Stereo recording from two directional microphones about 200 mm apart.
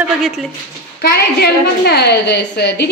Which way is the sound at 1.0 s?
50° left (ahead or behind).